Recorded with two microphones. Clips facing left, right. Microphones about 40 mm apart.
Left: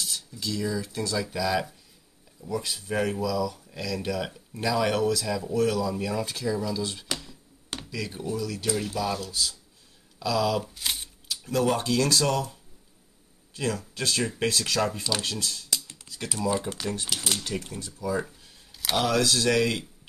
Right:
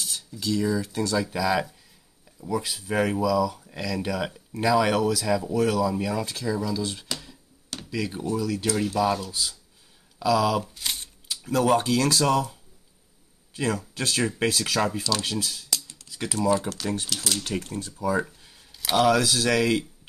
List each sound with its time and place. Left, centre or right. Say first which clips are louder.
0.0 s speech: right 2 dB; centre
7.9 s speech: right 4 dB; centre
10.1 s a sound: right 3 dB; centre
11.2 s speech: right 3 dB; centre
13.6 s speech: right 2 dB; centre
16.1 s typing: right 3 dB; centre
16.3 s speech: right 4 dB; centre
17.7 s speech: right 5 dB; right
18.7 s speech: right 5 dB; centre